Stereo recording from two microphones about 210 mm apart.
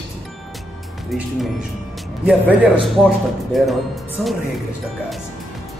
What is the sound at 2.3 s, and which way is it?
Speech, 5° right (ahead or behind).